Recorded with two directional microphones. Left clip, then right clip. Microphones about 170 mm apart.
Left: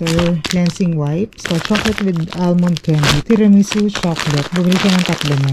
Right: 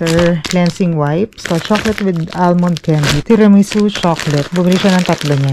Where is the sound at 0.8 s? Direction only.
15° left (ahead or behind).